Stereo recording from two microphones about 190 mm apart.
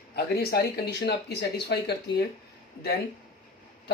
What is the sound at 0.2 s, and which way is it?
Speech, 55° left (ahead or behind).